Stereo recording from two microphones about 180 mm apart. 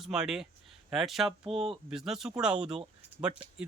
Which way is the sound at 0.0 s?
5° right (ahead or behind).